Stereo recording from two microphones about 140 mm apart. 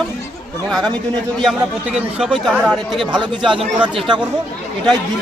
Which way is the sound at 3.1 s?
35° right (ahead or behind).